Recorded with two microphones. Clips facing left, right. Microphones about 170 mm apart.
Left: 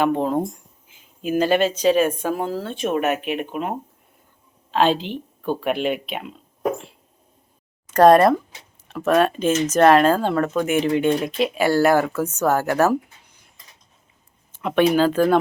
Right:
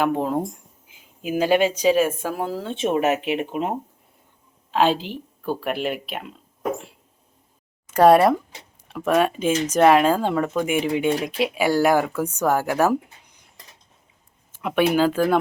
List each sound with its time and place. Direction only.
0.0 s speech: 5° right (ahead or behind)
2.7 s speech: 25° right (ahead or behind)
4.7 s speech: 10° right (ahead or behind)
7.9 s speech: 10° right (ahead or behind)
14.5 s speech: 10° right (ahead or behind)